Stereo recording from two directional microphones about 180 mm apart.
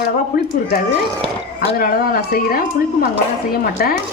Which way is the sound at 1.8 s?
55° left (ahead or behind).